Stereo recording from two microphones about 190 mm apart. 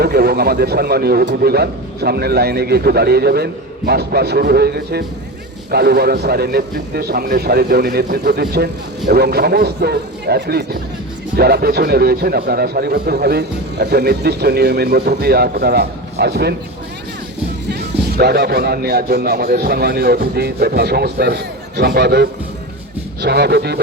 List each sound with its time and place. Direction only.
0.0 s a man's voice: 60° right (ahead or behind)
17.7 s a man's voice: 60° right (ahead or behind)